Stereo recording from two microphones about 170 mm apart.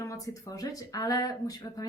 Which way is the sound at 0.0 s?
20° left (ahead or behind).